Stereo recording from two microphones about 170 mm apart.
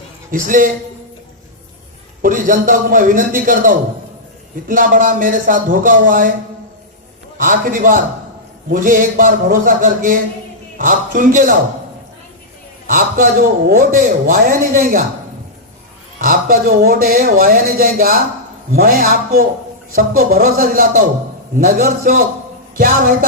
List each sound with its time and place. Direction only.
0.3 s speech: 55° right (ahead or behind)
2.2 s speech: 50° right (ahead or behind)
7.3 s speech: 55° right (ahead or behind)
12.9 s a man's voice: 55° right (ahead or behind)
16.1 s a man's voice: 55° right (ahead or behind)